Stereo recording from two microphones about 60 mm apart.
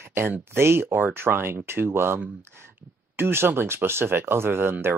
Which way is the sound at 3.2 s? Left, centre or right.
Right.